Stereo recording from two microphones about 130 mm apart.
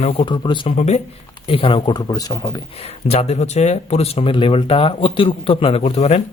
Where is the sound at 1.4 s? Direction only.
45° left (ahead or behind).